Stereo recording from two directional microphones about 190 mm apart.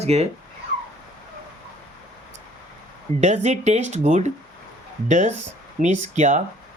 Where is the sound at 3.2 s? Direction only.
35° right (ahead or behind).